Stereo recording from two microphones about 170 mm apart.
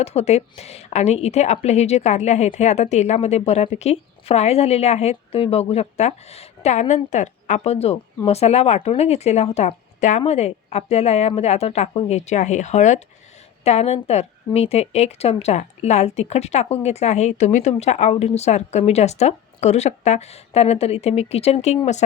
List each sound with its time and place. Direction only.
0.0 s a woman's voice: 40° left (ahead or behind)